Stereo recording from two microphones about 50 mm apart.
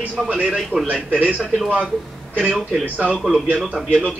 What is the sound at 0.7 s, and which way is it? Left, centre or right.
Speech, right.